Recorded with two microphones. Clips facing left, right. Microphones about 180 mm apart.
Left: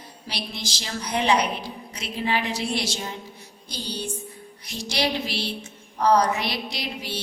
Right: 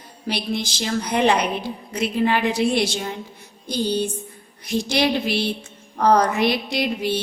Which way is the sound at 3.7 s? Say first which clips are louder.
Right 11 dB; 55° right (ahead or behind).